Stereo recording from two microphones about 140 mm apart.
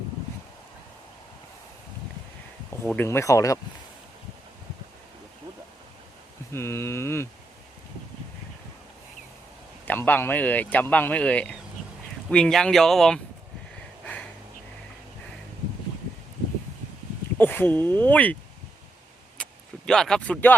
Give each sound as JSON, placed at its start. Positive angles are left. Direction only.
{"t": 2.8, "sound": "speech", "side_deg": 15}
{"t": 6.5, "sound": "speech", "side_deg": 20}
{"t": 9.8, "sound": "a man's voice", "side_deg": 10}
{"t": 14.0, "sound": "snort", "side_deg": 10}
{"t": 17.3, "sound": "speech", "side_deg": 15}
{"t": 19.4, "sound": "vehicle", "side_deg": 5}